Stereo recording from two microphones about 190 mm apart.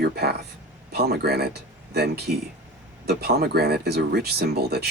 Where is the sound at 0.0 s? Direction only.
60° right (ahead or behind).